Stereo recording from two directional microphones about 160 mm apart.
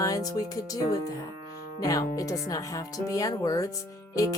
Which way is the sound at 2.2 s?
20° left (ahead or behind).